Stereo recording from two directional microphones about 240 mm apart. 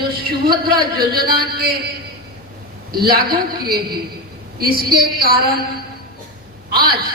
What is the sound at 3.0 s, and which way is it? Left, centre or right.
A woman's voice, right.